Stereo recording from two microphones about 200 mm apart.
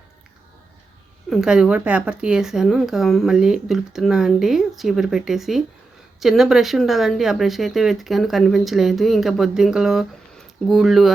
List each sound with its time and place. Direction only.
1.3 s speech: 5° right (ahead or behind)